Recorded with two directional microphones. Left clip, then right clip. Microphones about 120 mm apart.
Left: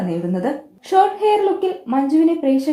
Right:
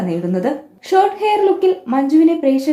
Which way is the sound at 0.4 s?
15° left (ahead or behind).